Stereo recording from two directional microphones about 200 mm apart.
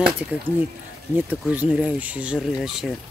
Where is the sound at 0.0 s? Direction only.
5° right (ahead or behind).